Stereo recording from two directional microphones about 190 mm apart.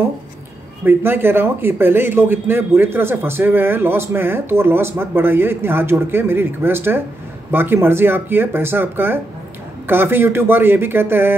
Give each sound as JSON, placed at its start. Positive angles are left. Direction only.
{"t": 0.8, "sound": "a man's voice", "side_deg": -10}